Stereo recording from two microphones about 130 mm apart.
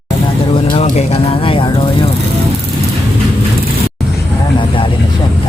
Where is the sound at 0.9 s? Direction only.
55° left (ahead or behind); by 2.0 s 40° left (ahead or behind).